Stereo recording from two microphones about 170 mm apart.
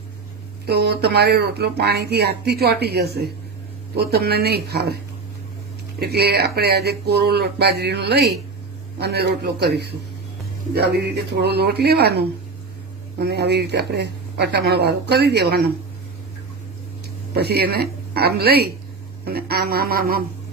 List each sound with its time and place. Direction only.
0.7 s speech: 70° right (ahead or behind)
6.0 s speech: 70° right (ahead or behind)
17.3 s a woman's voice: 70° right (ahead or behind)